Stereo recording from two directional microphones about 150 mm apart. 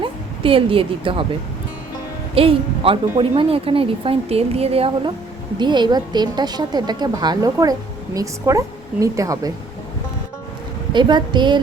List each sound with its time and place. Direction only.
0.0 s a woman's voice: 35° right (ahead or behind)
2.3 s a woman's voice: 40° right (ahead or behind)
5.5 s a woman's voice: 30° right (ahead or behind)
10.9 s a woman's voice: 30° right (ahead or behind)